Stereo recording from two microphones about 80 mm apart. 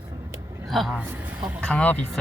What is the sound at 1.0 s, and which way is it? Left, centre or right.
Speech, right.